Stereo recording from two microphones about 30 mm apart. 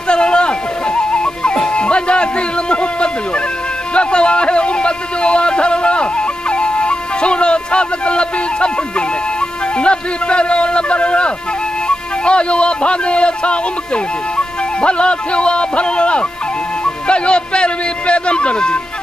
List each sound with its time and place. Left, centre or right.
0.1 s music: left
3.9 s a sound: left
9.8 s speech: left